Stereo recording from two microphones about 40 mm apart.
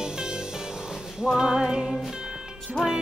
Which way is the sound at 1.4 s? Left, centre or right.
Centre.